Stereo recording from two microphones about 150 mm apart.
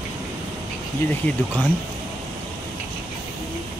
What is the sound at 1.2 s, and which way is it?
Speech, 10° left (ahead or behind).